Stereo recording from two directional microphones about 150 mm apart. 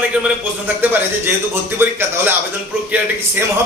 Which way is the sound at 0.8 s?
15° right (ahead or behind).